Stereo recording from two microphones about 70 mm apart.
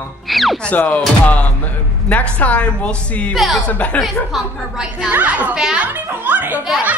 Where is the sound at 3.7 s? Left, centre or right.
Centre.